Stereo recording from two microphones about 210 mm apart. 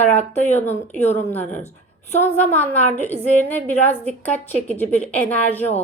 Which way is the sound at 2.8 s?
35° left (ahead or behind).